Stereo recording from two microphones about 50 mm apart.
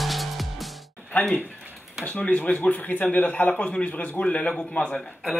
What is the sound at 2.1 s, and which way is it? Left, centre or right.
A man's voice, left.